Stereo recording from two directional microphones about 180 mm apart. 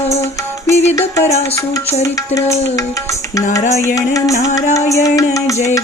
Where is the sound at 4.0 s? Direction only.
20° left (ahead or behind).